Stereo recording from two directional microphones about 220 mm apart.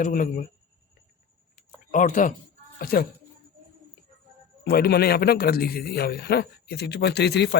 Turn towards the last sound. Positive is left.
turn(degrees=50)  # may be behind; listen again after turning